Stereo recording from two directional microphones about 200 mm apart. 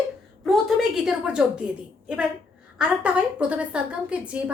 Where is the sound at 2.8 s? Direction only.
5° right (ahead or behind).